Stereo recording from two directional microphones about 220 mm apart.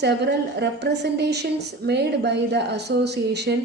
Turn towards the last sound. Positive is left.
turn(degrees=-50)  # may be behind; listen again after turning